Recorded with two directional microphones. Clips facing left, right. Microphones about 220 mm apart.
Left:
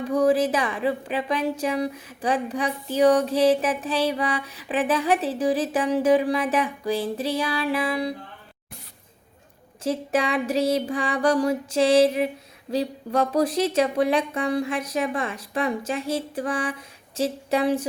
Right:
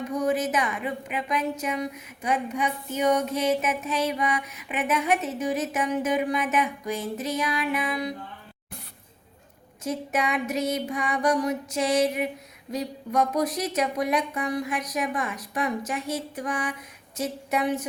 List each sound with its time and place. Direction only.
0.0 s speech: 30° left (ahead or behind)
9.8 s speech: 30° left (ahead or behind)